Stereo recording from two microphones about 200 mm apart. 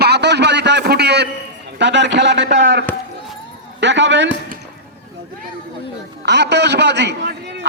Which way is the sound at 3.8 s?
65° right (ahead or behind).